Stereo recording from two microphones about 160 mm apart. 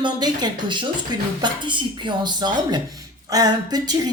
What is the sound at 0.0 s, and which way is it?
Speech, 25° right (ahead or behind).